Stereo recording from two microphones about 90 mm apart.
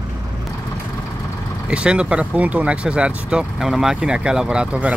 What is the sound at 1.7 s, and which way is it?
Speech, 10° right (ahead or behind).